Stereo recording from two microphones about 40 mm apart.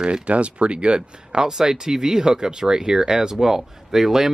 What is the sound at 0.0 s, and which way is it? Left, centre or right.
Speech, right.